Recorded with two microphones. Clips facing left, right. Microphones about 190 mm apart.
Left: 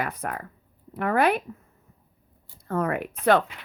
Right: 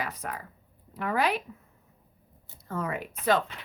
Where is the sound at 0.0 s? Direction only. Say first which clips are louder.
Left 5 dB; 55° left (ahead or behind).